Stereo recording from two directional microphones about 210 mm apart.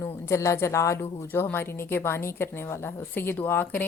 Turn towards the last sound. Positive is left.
turn(degrees=10)  # may be behind; listen again after turning